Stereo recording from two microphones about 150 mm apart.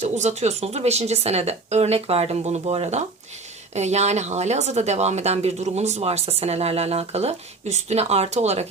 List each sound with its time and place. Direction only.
0.0 s speech: 50° right (ahead or behind)